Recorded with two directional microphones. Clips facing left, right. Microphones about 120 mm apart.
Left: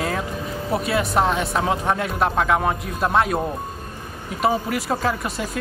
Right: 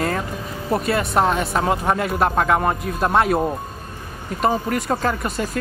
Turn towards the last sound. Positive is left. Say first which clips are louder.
# right 2 dB
turn(degrees=0)  # may be behind; listen again after turning